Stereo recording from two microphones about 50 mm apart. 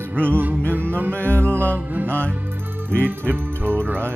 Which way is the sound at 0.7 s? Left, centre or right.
Right.